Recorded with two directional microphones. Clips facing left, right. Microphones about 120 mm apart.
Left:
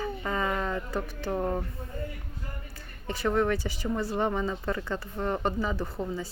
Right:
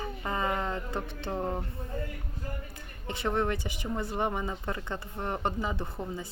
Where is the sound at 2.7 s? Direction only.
20° right (ahead or behind).